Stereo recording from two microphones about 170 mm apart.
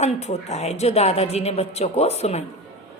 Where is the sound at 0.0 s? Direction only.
40° left (ahead or behind).